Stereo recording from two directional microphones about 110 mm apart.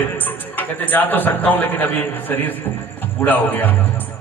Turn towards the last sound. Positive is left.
turn(degrees=15)  # may be behind; listen again after turning